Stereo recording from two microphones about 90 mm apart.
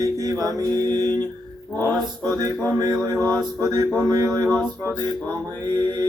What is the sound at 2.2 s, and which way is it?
Male singing, 45° right (ahead or behind).